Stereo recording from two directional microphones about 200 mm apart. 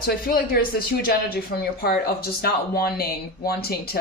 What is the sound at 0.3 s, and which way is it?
Speech, 50° left (ahead or behind).